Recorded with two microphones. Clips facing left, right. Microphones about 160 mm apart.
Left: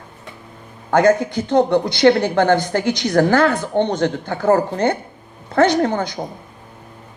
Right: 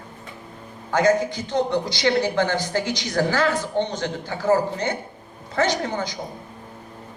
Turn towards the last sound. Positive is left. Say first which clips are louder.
# left 8 dB
turn(degrees=55)  # may be behind; listen again after turning